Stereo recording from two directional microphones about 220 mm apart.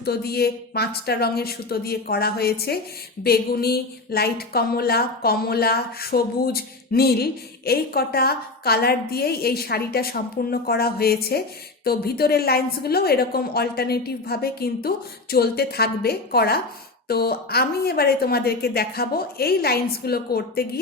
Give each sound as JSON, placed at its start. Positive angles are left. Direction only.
{"t": 0.0, "sound": "a woman's voice", "side_deg": 45}